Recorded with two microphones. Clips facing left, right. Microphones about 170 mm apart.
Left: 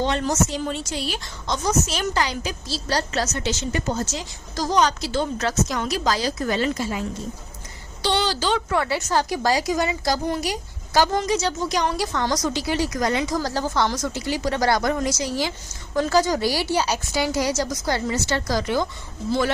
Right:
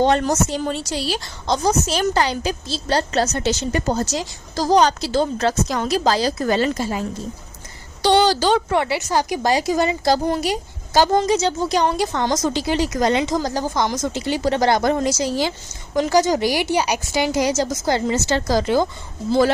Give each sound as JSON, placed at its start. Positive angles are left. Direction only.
{"t": 0.0, "sound": "a woman's voice", "side_deg": -50}
{"t": 8.0, "sound": "a woman's voice", "side_deg": -45}
{"t": 8.9, "sound": "a woman's voice", "side_deg": -10}
{"t": 16.0, "sound": "a woman's voice", "side_deg": -15}